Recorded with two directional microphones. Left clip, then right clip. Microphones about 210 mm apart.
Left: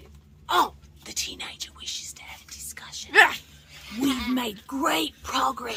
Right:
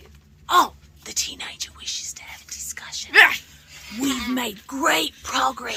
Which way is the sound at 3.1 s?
25° left (ahead or behind).